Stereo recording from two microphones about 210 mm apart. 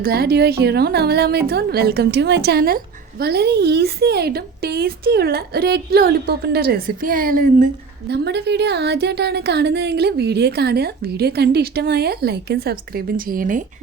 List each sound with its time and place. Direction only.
0.0 s a woman's voice: 50° right (ahead or behind)